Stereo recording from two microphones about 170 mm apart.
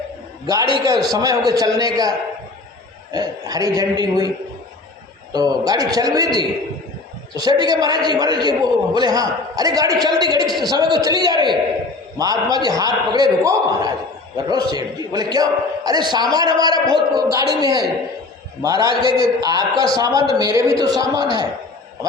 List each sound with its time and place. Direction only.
0.4 s a man's voice: 20° right (ahead or behind)
5.3 s a man's voice: 25° right (ahead or behind)
19.0 s a man's voice: 30° left (ahead or behind)
19.4 s a man's voice: 25° right (ahead or behind)